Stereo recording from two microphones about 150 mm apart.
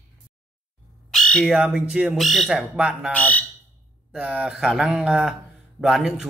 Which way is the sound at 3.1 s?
10° left (ahead or behind).